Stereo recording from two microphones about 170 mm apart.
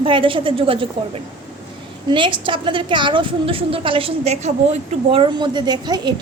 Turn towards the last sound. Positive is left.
turn(degrees=-25)  # may be behind; listen again after turning